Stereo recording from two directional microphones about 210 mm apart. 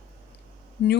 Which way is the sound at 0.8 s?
55° left (ahead or behind).